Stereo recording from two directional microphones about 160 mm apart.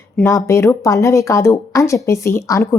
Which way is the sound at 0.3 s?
20° left (ahead or behind).